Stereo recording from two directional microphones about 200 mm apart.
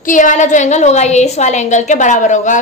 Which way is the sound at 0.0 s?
40° left (ahead or behind).